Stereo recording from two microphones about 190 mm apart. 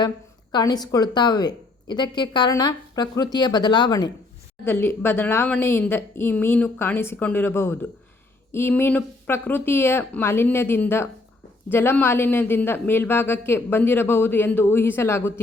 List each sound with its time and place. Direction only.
0.5 s a woman's voice: 20° left (ahead or behind)